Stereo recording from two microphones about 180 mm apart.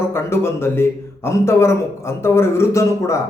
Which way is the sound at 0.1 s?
15° left (ahead or behind).